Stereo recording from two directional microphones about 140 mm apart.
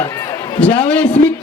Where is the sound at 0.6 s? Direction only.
35° left (ahead or behind).